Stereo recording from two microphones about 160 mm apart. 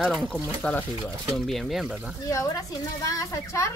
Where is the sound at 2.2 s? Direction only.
20° left (ahead or behind).